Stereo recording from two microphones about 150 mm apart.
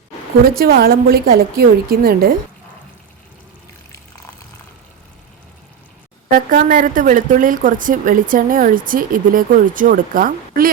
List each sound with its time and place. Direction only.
0.6 s a woman's voice: 90° right
6.3 s speech: 70° right (ahead or behind)